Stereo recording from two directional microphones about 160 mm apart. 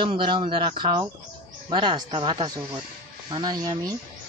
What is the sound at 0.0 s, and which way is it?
Speech, 30° right (ahead or behind).